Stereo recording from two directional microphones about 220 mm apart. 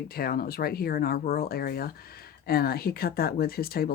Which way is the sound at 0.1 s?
45° left (ahead or behind).